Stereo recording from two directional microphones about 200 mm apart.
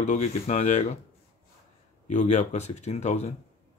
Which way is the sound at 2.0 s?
35° left (ahead or behind).